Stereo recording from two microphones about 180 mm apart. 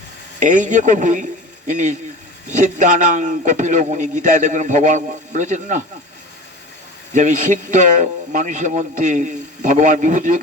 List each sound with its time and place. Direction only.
0.3 s a man's voice: 45° right (ahead or behind)
7.1 s a man's voice: 40° right (ahead or behind)